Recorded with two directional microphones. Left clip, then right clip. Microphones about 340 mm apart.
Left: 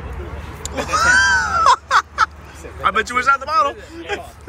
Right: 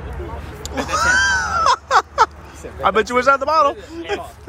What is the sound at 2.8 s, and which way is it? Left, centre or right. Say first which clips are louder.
A man's voice: right 1 dB; centre.